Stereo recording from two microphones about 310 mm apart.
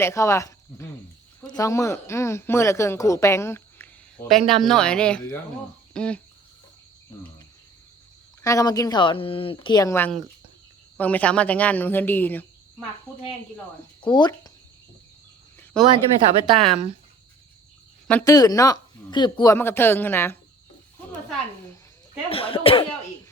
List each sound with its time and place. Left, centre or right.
0.0 s speech: centre
8.4 s speech: centre
14.0 s speech: centre
15.7 s speech: centre
18.1 s speech: centre
22.3 s speech: centre